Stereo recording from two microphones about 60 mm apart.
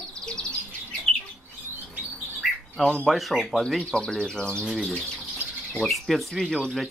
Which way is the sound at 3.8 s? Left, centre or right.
Centre.